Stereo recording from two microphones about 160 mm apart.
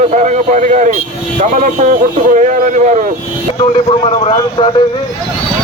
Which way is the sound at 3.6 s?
35° left (ahead or behind).